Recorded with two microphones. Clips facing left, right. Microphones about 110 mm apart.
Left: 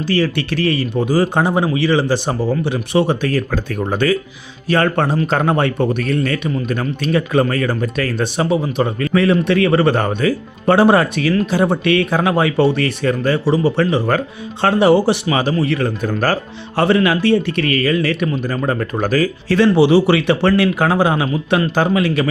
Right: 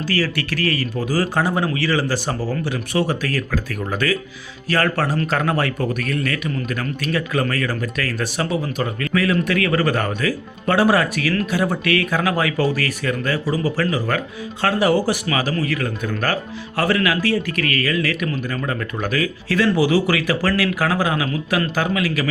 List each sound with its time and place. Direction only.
0.1 s speech: 25° left (ahead or behind)